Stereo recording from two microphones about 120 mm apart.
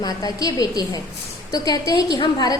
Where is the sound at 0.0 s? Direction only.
30° left (ahead or behind).